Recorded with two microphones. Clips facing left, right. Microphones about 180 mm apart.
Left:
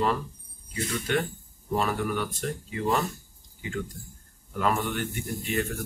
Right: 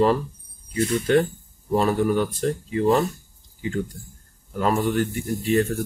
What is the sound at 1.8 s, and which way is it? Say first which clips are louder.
Speech: right 8 dB; 35° right (ahead or behind).